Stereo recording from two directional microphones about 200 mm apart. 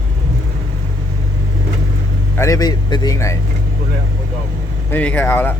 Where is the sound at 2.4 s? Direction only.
15° left (ahead or behind).